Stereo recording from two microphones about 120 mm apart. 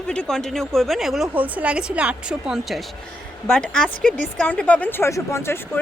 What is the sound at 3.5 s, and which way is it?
A woman's voice, 5° left (ahead or behind).